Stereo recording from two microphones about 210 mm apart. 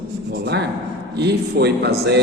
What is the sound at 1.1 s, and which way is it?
Speech, 50° right (ahead or behind).